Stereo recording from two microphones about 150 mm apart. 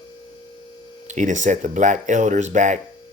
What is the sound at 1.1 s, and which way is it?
Speech, 55° right (ahead or behind).